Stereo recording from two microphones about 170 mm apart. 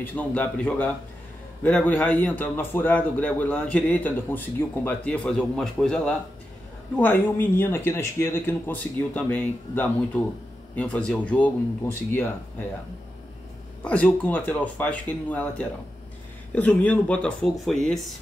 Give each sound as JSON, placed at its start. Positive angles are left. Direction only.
{"t": 0.0, "sound": "a man's voice", "side_deg": 10}
{"t": 13.8, "sound": "a man's voice", "side_deg": 10}